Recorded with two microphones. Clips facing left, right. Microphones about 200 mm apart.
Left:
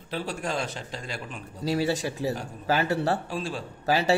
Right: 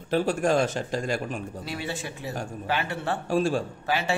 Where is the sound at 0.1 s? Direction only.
50° right (ahead or behind).